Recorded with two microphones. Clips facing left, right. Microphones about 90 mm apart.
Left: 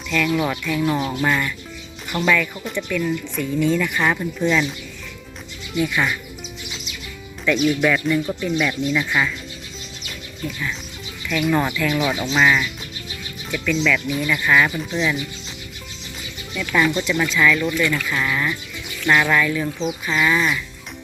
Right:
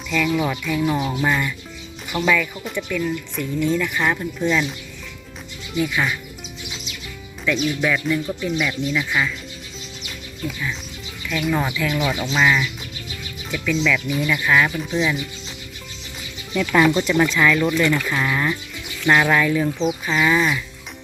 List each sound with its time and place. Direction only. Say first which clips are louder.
0.3 s speech: even; centre (ahead or behind)
0.8 s music: even; 5° right (ahead or behind)
2.1 s speech: even; 10° right (ahead or behind)
5.7 s speech: left 1 dB; 5° right (ahead or behind)
7.4 s speech: left 3 dB; centre (ahead or behind)
11.3 s speech: left 2 dB; 5° right (ahead or behind)
11.9 s speech: even; 20° left (ahead or behind)
12.2 s speech: even; centre (ahead or behind)
16.6 s speech: right 3 dB; 35° right (ahead or behind)
19.6 s speech: right 3 dB; 5° right (ahead or behind)
20.1 s speech: even; 20° right (ahead or behind)